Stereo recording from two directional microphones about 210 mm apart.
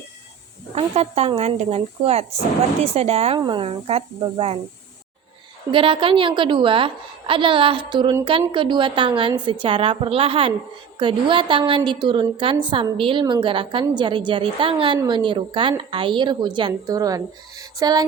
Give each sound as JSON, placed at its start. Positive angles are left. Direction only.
{"t": 0.8, "sound": "a woman's voice", "side_deg": -30}
{"t": 5.7, "sound": "a woman's voice", "side_deg": -25}